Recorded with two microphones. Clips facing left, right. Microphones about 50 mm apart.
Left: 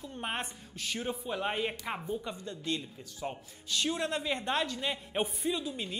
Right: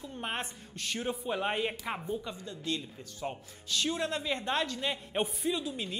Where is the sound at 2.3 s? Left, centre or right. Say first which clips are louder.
Even; left.